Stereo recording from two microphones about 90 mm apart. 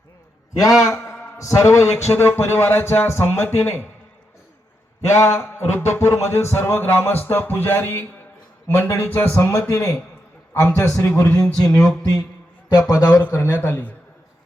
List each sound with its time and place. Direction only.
0.5 s a man's voice: 40° left (ahead or behind); by 3.8 s 25° left (ahead or behind)
5.0 s a man's voice: 30° left (ahead or behind)
9.6 s a man's voice: 35° left (ahead or behind)
12.9 s speech: 45° left (ahead or behind)
13.3 s a man's voice: 25° left (ahead or behind)